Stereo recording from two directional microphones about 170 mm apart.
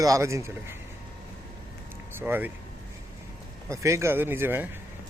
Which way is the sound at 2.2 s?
10° right (ahead or behind).